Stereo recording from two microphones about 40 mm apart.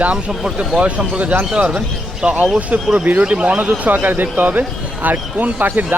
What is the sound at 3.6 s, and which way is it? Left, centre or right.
Speech, right.